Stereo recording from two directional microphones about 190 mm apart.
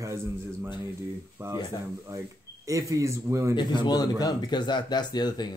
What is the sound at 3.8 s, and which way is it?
Speech, 20° left (ahead or behind).